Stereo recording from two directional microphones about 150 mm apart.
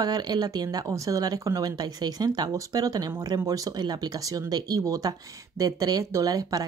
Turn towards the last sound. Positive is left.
turn(degrees=-25)  # may be behind; listen again after turning